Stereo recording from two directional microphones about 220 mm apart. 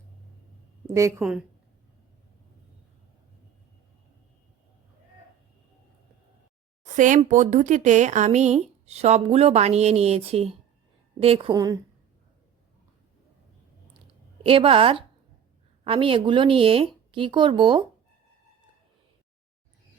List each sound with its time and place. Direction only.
0.9 s a woman's voice: 15° right (ahead or behind)
1.2 s a woman's voice: 5° right (ahead or behind)
6.8 s a sound: 35° right (ahead or behind)
7.2 s speech: 35° right (ahead or behind); by 11.8 s 15° right (ahead or behind)
14.4 s speech: 25° right (ahead or behind)